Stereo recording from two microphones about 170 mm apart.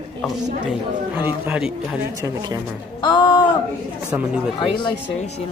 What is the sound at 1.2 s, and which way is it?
Speech, 10° right (ahead or behind).